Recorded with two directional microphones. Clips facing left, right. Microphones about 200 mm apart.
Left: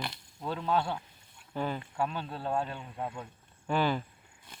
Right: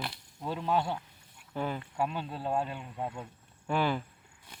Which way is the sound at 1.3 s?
10° right (ahead or behind).